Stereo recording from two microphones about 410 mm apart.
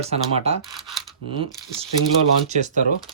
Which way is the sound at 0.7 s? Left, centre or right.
Centre.